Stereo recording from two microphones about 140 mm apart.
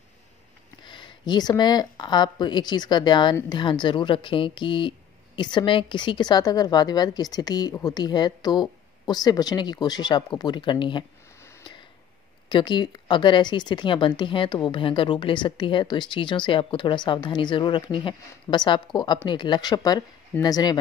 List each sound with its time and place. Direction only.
0.8 s speech: 35° left (ahead or behind)
12.4 s speech: 35° left (ahead or behind)